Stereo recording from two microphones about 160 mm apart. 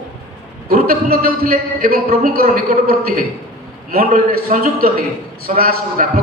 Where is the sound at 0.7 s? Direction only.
70° right (ahead or behind).